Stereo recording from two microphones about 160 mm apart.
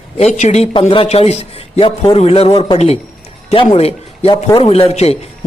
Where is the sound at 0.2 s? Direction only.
45° left (ahead or behind).